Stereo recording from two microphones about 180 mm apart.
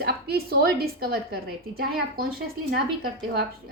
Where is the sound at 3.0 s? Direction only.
55° right (ahead or behind).